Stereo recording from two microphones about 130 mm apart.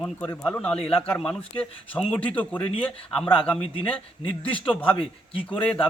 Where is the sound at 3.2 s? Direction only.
40° left (ahead or behind).